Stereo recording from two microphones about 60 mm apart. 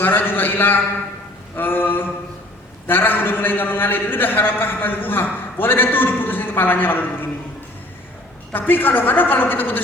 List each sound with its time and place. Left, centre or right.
0.0 s a sound: left
2.8 s a man's voice: left
8.5 s a man's voice: left